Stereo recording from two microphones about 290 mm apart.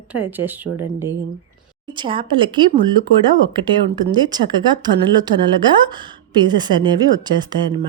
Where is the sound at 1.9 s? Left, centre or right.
Centre.